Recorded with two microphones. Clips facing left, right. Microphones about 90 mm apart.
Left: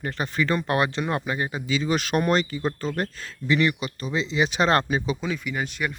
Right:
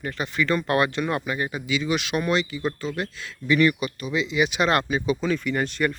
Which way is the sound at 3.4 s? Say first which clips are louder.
Right 2 dB; 25° left (ahead or behind).